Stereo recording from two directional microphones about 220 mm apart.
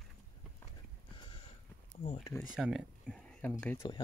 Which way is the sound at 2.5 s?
Centre (ahead or behind).